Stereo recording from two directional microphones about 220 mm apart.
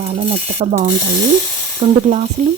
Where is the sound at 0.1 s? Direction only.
30° right (ahead or behind).